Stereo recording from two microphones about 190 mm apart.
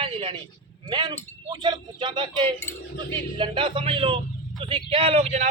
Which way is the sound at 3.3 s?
25° right (ahead or behind).